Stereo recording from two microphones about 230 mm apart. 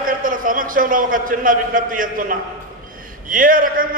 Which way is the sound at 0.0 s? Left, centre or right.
Right.